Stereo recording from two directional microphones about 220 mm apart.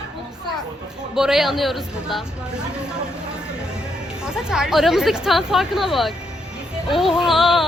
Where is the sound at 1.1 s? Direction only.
Centre (ahead or behind).